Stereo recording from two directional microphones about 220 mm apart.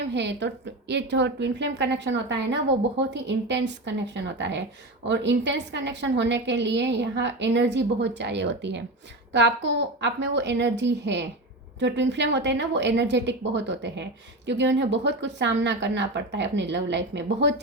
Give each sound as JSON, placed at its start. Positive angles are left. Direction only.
{"t": 0.1, "sound": "speech", "side_deg": -50}